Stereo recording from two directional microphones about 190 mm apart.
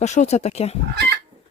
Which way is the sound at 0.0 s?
40° left (ahead or behind).